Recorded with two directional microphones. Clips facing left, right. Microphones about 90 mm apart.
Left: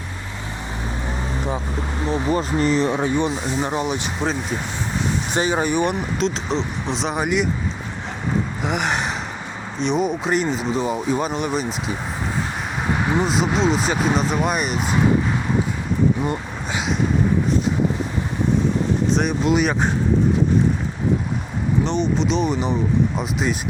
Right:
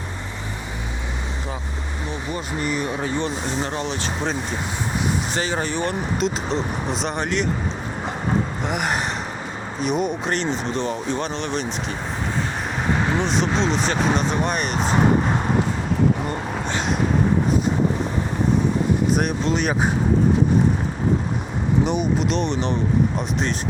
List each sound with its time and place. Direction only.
2.0 s speech: 35° left (ahead or behind)
3.2 s speech: 15° left (ahead or behind)
5.3 s speech: 15° left (ahead or behind)
6.1 s speech: 5° right (ahead or behind)
8.6 s speech: centre (ahead or behind)
13.1 s speech: 10° left (ahead or behind)
19.5 s speech: 5° left (ahead or behind)
21.8 s speech: 10° right (ahead or behind)